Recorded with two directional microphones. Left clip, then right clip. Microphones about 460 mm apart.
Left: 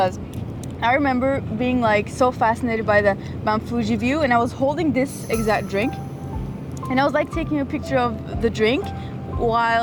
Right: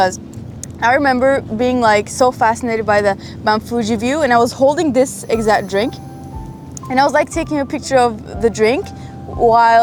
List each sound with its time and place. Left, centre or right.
0.8 s speech: right
5.3 s speech: right
6.9 s speech: right